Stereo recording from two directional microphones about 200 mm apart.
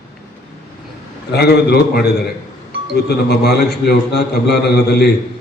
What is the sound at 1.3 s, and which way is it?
A man's voice, 55° left (ahead or behind).